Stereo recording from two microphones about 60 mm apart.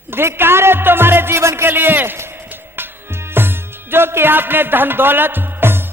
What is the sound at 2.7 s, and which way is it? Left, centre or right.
Music, right.